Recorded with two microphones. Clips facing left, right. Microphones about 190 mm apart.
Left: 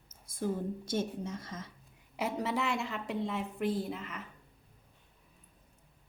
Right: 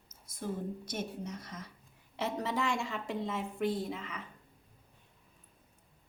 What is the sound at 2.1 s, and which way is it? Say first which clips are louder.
A woman's voice: left 1 dB; 10° left (ahead or behind).